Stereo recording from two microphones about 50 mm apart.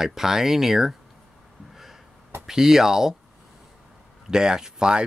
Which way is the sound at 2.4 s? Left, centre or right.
Centre.